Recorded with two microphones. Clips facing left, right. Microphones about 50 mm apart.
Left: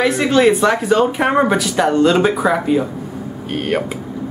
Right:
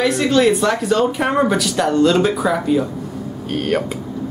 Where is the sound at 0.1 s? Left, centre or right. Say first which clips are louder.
Left 2 dB; centre.